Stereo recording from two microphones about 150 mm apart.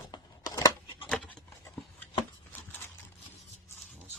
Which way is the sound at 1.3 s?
10° left (ahead or behind).